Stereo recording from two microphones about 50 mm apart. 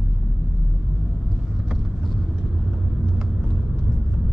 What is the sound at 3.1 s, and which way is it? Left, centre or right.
Vehicle, centre.